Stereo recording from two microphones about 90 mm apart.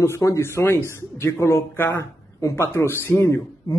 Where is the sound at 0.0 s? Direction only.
35° left (ahead or behind).